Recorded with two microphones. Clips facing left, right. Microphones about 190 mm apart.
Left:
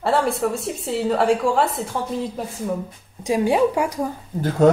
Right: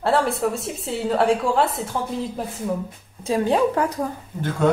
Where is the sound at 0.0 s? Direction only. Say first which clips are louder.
Even; centre (ahead or behind).